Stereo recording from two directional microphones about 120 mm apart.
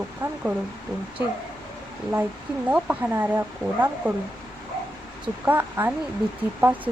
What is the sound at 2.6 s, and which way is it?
Speech, 10° right (ahead or behind).